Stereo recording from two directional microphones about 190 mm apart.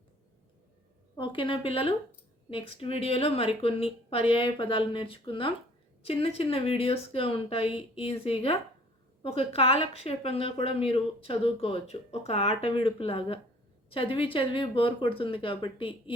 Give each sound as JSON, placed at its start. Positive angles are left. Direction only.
{"t": 1.1, "sound": "a woman's voice", "side_deg": 25}